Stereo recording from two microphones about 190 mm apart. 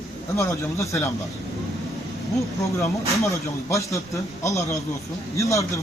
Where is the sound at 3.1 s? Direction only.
15° left (ahead or behind).